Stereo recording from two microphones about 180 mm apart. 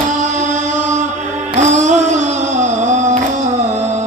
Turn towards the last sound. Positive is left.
turn(degrees=-40)  # may be behind; listen again after turning